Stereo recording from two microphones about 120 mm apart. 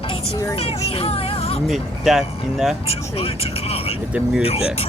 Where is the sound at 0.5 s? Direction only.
55° left (ahead or behind).